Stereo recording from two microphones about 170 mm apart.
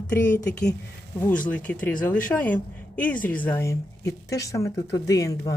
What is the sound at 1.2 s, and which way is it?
A woman's voice, 10° left (ahead or behind).